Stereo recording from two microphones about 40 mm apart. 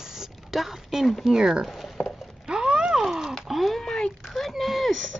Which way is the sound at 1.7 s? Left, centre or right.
Centre.